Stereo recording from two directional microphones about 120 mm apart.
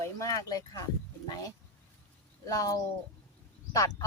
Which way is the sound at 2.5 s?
30° left (ahead or behind).